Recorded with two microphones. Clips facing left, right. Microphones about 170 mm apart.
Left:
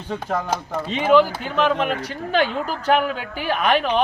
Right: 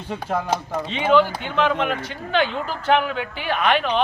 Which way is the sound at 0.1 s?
10° right (ahead or behind).